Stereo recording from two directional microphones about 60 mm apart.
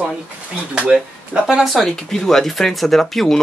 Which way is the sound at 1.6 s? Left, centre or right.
Centre.